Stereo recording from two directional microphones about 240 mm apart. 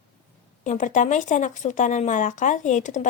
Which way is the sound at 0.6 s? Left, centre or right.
Left.